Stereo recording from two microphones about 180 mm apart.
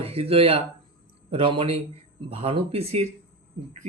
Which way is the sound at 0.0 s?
35° right (ahead or behind).